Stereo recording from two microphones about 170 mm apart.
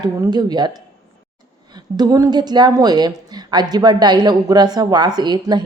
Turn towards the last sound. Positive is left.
turn(degrees=-25)  # may be behind; listen again after turning